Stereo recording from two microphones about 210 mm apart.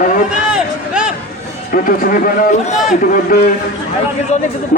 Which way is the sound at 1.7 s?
40° left (ahead or behind).